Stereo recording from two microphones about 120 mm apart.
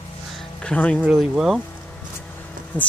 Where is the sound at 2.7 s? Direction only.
10° left (ahead or behind).